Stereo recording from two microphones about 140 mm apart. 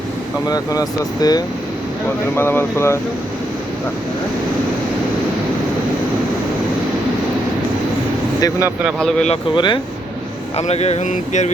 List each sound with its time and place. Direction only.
0.4 s speech: 25° left (ahead or behind)
2.3 s speech: 15° left (ahead or behind)
9.0 s speech: 5° left (ahead or behind)
9.6 s speech: 35° left (ahead or behind)
10.6 s speech: 50° left (ahead or behind)